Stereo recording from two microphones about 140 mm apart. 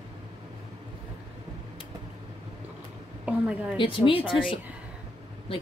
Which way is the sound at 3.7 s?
40° left (ahead or behind).